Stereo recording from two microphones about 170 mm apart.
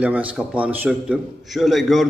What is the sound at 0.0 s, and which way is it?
A man's voice, 10° right (ahead or behind).